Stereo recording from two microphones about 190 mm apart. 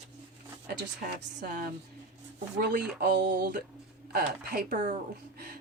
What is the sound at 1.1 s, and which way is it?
Speech, 55° right (ahead or behind).